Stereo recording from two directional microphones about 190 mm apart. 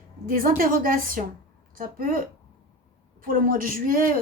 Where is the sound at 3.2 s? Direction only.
45° right (ahead or behind).